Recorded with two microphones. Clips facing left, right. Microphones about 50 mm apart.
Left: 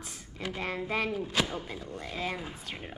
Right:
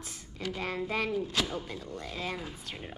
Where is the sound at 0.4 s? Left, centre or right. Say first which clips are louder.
Even; centre.